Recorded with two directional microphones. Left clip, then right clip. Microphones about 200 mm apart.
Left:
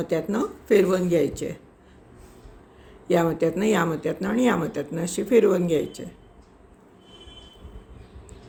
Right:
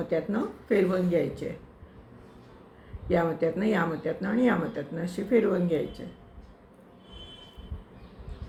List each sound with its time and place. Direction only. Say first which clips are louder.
0.1 s speech: left 3 dB; 55° left (ahead or behind)
3.1 s speech: left 4 dB; 55° left (ahead or behind)